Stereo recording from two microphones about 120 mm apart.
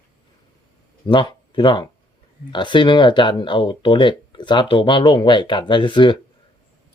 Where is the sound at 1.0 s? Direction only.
40° left (ahead or behind).